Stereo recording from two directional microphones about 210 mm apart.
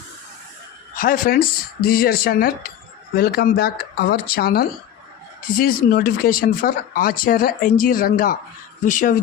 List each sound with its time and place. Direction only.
0.9 s speech: 40° left (ahead or behind)